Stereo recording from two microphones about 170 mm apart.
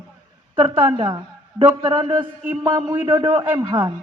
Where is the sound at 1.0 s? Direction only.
25° right (ahead or behind).